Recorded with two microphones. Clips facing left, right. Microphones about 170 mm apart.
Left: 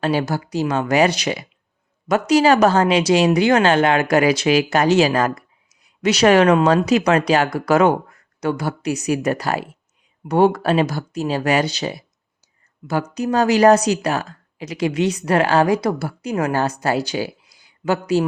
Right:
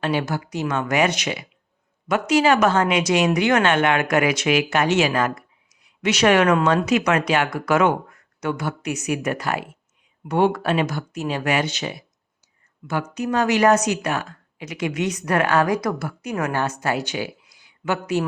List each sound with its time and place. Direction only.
0.0 s speech: 35° left (ahead or behind)